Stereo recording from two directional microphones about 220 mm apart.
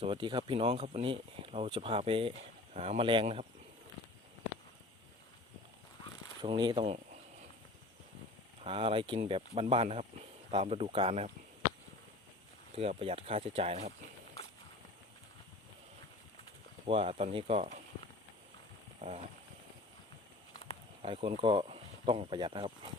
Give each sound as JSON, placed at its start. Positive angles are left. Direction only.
{"t": 0.0, "sound": "speech", "side_deg": -20}
{"t": 6.4, "sound": "speech", "side_deg": -20}
{"t": 8.6, "sound": "speech", "side_deg": -25}
{"t": 12.7, "sound": "speech", "side_deg": -25}
{"t": 16.8, "sound": "speech", "side_deg": -25}
{"t": 19.0, "sound": "speech", "side_deg": -30}
{"t": 21.0, "sound": "speech", "side_deg": -25}